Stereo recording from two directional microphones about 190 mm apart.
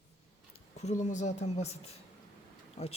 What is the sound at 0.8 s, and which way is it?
A man's voice, 40° left (ahead or behind).